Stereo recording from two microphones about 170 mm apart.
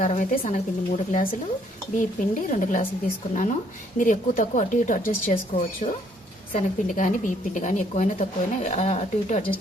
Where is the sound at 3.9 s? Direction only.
50° left (ahead or behind).